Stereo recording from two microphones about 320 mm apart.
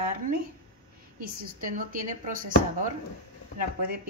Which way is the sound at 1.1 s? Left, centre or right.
Right.